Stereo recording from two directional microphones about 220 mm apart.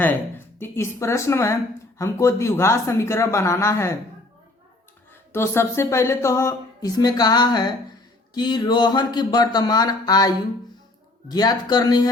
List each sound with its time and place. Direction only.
0.0 s speech: 10° left (ahead or behind)
5.3 s speech: 10° left (ahead or behind)